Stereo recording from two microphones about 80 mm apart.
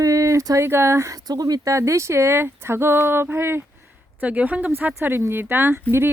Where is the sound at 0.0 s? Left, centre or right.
Right.